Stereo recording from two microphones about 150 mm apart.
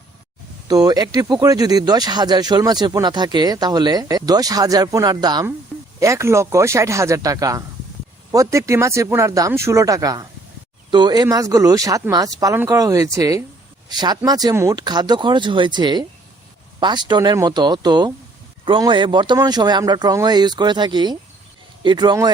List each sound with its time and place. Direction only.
0.7 s speech: 25° right (ahead or behind)